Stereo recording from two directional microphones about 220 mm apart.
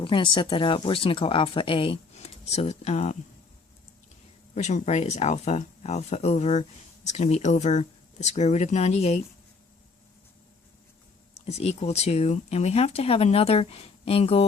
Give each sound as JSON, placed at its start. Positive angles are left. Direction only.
{"t": 0.0, "sound": "speech", "side_deg": 20}
{"t": 4.5, "sound": "speech", "side_deg": 30}
{"t": 11.4, "sound": "speech", "side_deg": 30}